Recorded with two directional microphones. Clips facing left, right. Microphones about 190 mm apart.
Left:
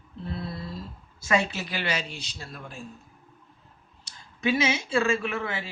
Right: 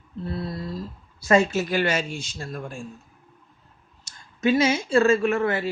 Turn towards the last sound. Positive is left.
turn(degrees=-45)  # may be behind; listen again after turning